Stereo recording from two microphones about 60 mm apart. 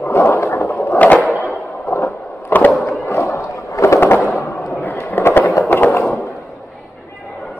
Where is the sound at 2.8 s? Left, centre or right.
Left.